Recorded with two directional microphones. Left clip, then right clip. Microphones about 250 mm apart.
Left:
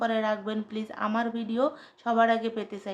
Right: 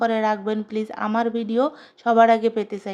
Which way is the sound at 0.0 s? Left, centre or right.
Right.